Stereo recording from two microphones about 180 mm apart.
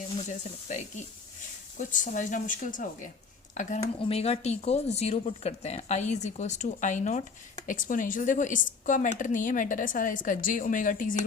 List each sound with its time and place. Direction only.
0.3 s a woman's voice: 40° left (ahead or behind)